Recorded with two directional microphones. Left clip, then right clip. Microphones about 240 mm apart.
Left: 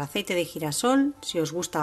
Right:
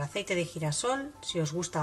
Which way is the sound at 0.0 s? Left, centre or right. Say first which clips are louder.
Left 4 dB; left.